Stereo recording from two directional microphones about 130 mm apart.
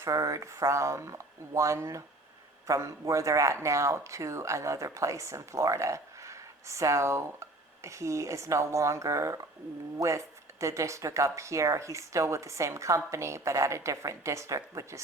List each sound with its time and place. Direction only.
0.0 s speech: 25° right (ahead or behind)